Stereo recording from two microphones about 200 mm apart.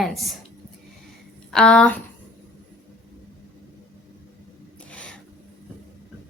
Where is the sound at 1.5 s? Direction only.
5° left (ahead or behind).